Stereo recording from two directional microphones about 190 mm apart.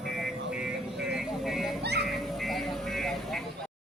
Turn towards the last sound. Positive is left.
turn(degrees=0)  # may be behind; listen again after turning